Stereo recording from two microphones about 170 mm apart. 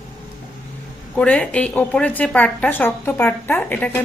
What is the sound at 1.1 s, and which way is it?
A woman's voice, 5° left (ahead or behind).